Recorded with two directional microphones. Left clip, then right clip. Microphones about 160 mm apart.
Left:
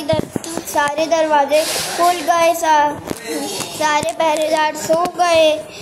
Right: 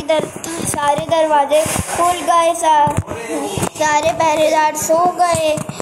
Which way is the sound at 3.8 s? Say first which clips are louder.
Right 2 dB; centre (ahead or behind).